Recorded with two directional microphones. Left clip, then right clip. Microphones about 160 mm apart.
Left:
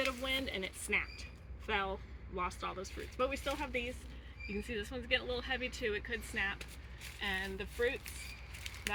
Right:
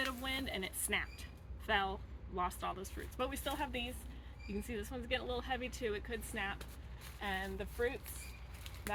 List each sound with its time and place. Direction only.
0.0 s music: 10° right (ahead or behind)
1.6 s speech: 20° right (ahead or behind)
4.6 s speech: centre (ahead or behind)